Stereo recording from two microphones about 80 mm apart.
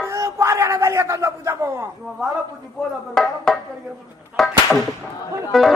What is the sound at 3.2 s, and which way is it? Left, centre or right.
Music, centre.